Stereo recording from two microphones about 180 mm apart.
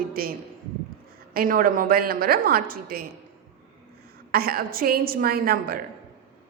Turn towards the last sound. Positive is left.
turn(degrees=-55)  # may be behind; listen again after turning